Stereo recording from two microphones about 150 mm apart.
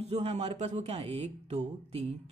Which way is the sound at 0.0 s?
45° right (ahead or behind).